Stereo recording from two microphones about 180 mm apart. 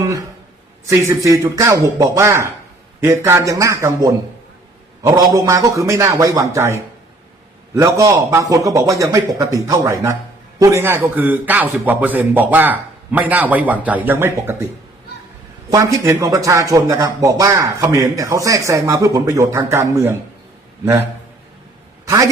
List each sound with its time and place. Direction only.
0.0 s a man's voice: 20° right (ahead or behind)
15.7 s speech: 20° right (ahead or behind)